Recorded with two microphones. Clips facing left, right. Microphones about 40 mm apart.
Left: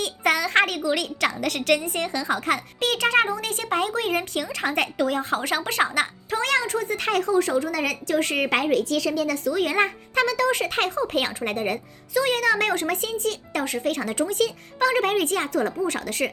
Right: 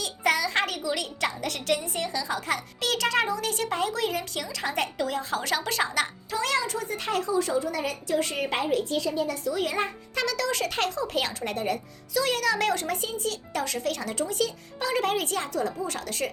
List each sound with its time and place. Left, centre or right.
0.0 s a woman's voice: left
2.9 s speech: left
10.2 s speech: left